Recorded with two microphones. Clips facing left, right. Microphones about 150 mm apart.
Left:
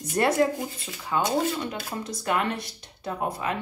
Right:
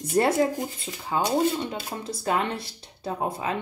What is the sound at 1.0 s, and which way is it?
Speech, 30° right (ahead or behind).